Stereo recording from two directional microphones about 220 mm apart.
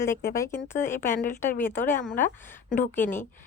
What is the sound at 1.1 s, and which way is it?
A woman's voice, 35° left (ahead or behind).